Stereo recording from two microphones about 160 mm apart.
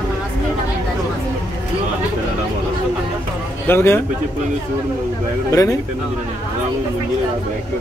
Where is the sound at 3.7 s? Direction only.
15° left (ahead or behind).